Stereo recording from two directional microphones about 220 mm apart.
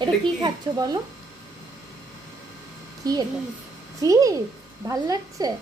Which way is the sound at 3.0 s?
15° right (ahead or behind).